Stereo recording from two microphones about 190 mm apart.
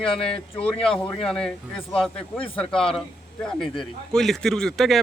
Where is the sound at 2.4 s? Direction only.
30° left (ahead or behind).